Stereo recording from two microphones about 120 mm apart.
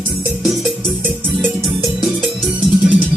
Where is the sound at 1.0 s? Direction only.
20° right (ahead or behind).